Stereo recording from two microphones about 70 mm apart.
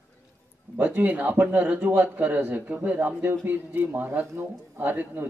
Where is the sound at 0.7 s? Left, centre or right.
Right.